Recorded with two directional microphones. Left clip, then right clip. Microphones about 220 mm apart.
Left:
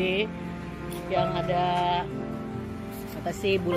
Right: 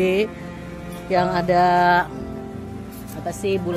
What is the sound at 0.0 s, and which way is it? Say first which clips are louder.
Speech: right 7 dB; 75° right (ahead or behind).